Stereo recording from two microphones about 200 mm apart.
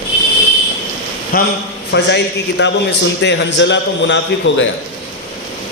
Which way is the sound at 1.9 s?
60° left (ahead or behind).